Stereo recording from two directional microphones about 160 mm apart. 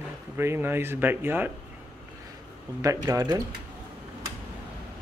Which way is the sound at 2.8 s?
20° right (ahead or behind).